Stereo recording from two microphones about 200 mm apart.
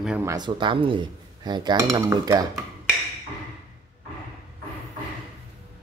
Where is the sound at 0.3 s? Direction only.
20° right (ahead or behind).